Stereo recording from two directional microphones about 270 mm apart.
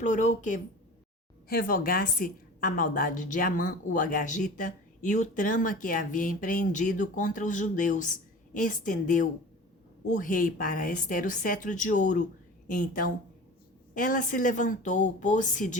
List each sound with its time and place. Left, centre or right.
0.0 s a woman's voice: left